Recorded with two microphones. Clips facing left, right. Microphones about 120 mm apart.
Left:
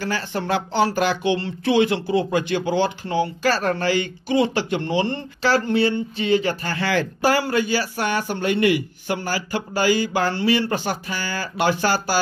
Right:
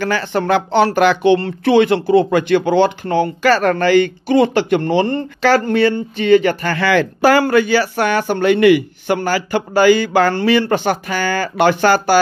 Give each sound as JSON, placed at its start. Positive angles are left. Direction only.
{"t": 0.0, "sound": "speech", "side_deg": -70}
{"t": 5.4, "sound": "speech", "side_deg": -60}